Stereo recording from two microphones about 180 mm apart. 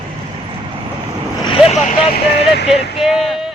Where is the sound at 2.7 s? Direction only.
Centre (ahead or behind).